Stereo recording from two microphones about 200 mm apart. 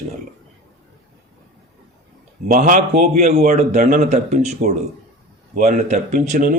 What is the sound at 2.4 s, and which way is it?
A man's voice, 40° right (ahead or behind).